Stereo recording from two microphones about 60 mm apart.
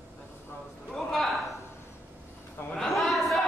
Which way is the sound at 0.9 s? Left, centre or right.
Centre.